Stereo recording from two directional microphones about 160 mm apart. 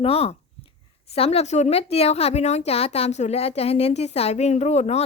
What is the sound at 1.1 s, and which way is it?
A woman's voice, 40° left (ahead or behind).